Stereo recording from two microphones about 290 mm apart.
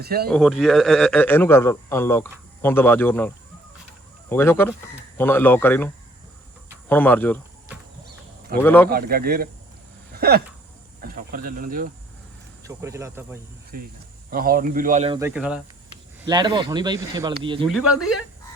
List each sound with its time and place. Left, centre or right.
0.0 s speech: right
0.3 s a man's voice: centre
8.6 s speech: centre
8.9 s speech: right
10.2 s a sound: right
11.0 s speech: right
12.6 s speech: centre
13.7 s speech: right
15.2 s a man's voice: centre
16.2 s speech: centre